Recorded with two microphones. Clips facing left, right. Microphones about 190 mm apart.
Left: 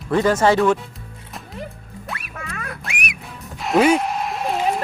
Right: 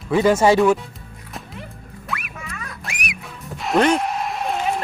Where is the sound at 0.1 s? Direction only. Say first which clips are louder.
Right 1 dB; 10° right (ahead or behind).